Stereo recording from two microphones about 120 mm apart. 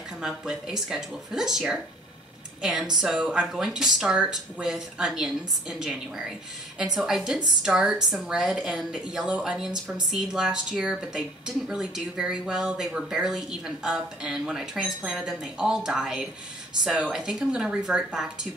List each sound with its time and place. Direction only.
0.2 s speech: 5° right (ahead or behind)